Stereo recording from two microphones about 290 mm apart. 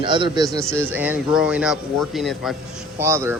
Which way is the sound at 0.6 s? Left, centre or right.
Centre.